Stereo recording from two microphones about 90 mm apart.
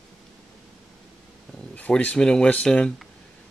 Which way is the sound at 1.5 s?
10° left (ahead or behind).